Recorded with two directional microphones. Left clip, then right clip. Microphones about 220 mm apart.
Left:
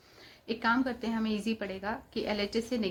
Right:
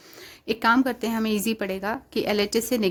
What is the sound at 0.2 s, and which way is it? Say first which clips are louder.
Speech: right 9 dB; 55° right (ahead or behind).